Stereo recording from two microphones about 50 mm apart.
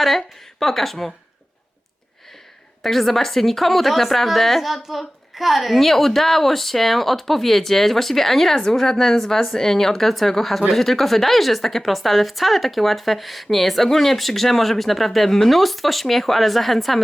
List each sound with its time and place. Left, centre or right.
0.0 s a woman's voice: centre
2.8 s a woman's voice: centre